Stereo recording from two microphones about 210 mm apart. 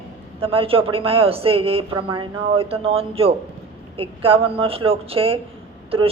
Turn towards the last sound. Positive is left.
turn(degrees=-25)  # may be behind; listen again after turning